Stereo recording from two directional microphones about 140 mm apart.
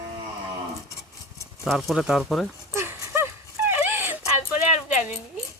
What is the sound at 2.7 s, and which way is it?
Horse, 15° right (ahead or behind).